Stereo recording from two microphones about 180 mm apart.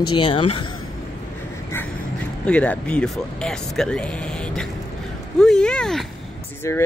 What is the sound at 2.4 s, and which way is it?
Speech, 5° left (ahead or behind).